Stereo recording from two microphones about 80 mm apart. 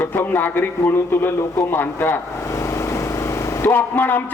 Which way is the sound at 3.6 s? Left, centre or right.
Left.